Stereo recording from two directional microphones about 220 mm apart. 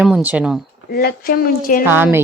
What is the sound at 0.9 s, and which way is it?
Speech, 45° left (ahead or behind).